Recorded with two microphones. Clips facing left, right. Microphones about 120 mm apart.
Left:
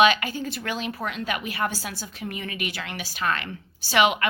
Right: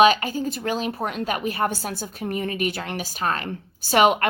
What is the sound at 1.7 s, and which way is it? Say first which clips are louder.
Speech: right 4 dB; 55° right (ahead or behind).